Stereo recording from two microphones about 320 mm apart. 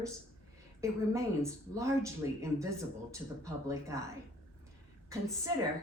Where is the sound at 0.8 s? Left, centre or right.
Centre.